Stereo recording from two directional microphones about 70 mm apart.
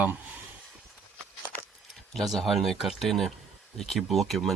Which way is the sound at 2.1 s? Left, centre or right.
Centre.